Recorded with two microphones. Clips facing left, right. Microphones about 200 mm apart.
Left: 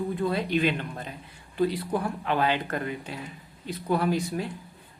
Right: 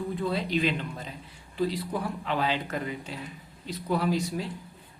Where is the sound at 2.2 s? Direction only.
55° left (ahead or behind).